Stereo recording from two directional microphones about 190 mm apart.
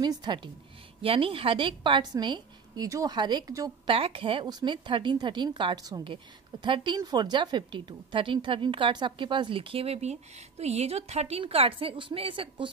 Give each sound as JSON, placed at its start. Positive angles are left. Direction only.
{"t": 0.0, "sound": "a woman's voice", "side_deg": -20}